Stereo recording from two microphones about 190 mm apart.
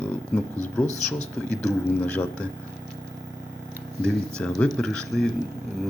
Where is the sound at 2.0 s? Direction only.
10° left (ahead or behind).